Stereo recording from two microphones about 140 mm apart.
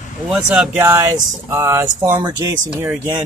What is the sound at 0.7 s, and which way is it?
Speech, 20° right (ahead or behind).